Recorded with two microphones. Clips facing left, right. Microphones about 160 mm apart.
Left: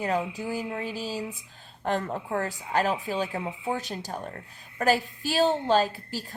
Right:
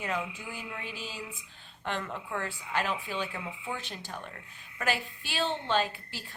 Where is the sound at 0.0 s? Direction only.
35° left (ahead or behind).